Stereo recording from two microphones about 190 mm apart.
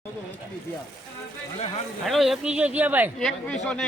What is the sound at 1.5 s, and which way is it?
Speech, 35° left (ahead or behind).